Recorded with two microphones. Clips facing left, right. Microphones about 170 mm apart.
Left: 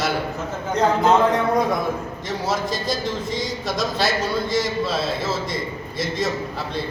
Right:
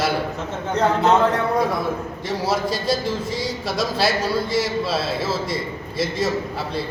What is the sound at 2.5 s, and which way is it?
A man's voice, 10° right (ahead or behind).